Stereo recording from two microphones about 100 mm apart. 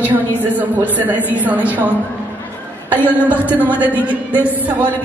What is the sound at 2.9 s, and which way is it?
Speech, 20° left (ahead or behind).